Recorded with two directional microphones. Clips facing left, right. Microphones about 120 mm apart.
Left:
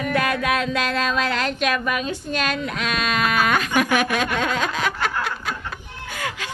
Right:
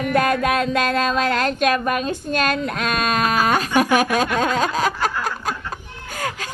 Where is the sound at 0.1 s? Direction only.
45° right (ahead or behind).